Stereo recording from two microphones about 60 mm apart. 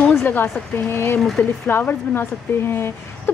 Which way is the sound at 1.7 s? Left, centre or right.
Left.